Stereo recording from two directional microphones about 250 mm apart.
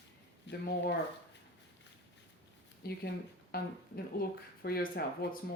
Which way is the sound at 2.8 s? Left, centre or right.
Left.